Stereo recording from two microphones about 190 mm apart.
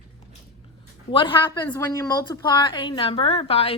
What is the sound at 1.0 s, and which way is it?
A woman's voice, 25° left (ahead or behind).